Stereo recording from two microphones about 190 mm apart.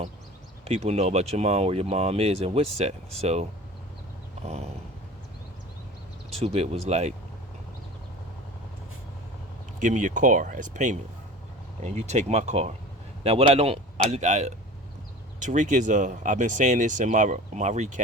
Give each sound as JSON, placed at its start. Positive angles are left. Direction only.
{"t": 0.7, "sound": "speech", "side_deg": -35}
{"t": 6.4, "sound": "speech", "side_deg": -30}
{"t": 9.8, "sound": "speech", "side_deg": -40}